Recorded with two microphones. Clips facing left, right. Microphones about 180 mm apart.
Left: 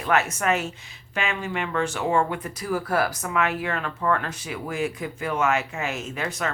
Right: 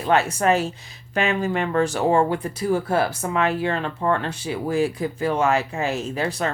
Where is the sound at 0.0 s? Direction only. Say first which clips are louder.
Right 4 dB; 30° right (ahead or behind).